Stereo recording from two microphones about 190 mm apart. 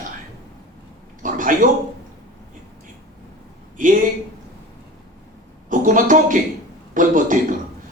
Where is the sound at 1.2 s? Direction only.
45° right (ahead or behind).